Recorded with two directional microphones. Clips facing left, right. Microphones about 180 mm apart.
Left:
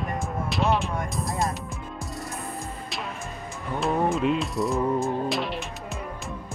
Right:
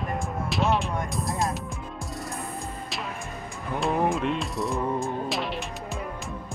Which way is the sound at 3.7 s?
Centre (ahead or behind).